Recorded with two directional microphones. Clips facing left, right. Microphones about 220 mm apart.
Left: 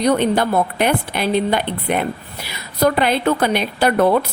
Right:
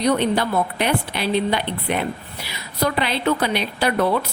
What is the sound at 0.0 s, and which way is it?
A woman's voice, 50° left (ahead or behind).